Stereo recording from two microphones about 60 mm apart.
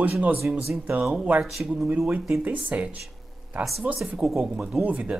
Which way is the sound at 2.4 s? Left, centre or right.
Right.